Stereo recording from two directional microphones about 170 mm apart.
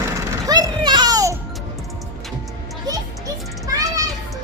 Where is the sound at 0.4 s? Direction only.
20° right (ahead or behind).